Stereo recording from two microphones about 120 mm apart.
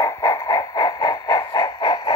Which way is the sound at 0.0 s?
25° left (ahead or behind).